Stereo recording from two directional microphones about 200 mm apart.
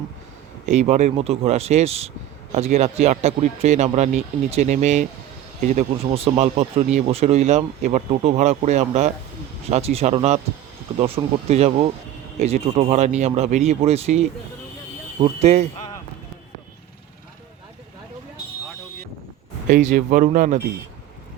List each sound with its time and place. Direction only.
0.6 s speech: 35° right (ahead or behind)
15.2 s speech: 35° right (ahead or behind)
19.6 s speech: 40° right (ahead or behind)